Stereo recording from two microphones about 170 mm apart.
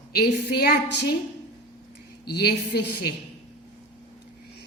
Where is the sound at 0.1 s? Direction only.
70° left (ahead or behind).